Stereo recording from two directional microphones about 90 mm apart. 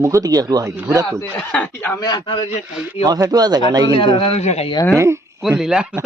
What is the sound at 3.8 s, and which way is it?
Speech, 80° left.